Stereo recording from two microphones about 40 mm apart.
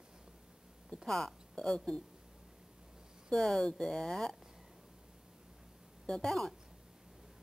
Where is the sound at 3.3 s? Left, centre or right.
Centre.